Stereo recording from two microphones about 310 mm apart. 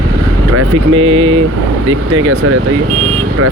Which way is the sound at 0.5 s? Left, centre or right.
Right.